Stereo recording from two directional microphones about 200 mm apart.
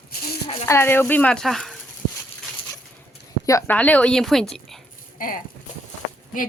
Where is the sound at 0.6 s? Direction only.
10° left (ahead or behind).